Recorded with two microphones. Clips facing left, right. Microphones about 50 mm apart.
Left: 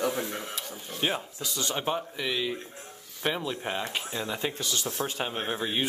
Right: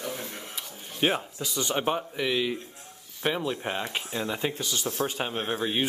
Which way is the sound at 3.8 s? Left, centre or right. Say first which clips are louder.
Even; centre.